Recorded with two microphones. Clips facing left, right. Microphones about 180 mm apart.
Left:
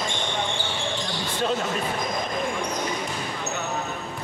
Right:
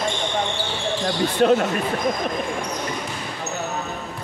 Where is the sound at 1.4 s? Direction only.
60° right (ahead or behind).